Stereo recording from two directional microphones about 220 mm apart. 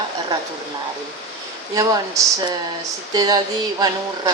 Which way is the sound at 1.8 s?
15° right (ahead or behind).